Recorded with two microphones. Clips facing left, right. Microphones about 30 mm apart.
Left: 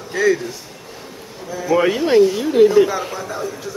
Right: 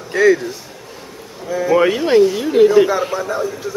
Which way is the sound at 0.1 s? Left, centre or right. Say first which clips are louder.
Right 4 dB; right.